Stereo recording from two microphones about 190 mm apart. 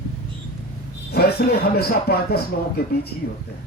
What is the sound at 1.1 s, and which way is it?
Speech, 55° left (ahead or behind).